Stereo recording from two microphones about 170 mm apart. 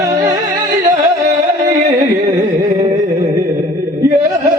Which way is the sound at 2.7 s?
45° right (ahead or behind).